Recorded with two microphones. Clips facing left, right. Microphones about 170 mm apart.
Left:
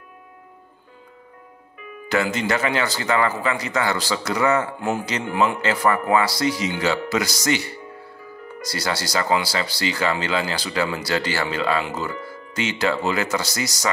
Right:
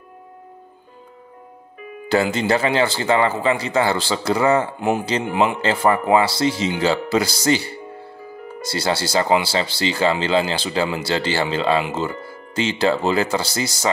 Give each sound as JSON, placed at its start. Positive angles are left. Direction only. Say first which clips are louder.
{"t": 2.0, "sound": "speech", "louder": "right 4 dB", "side_deg": -30}
{"t": 4.7, "sound": "speech", "louder": "right 4 dB", "side_deg": -20}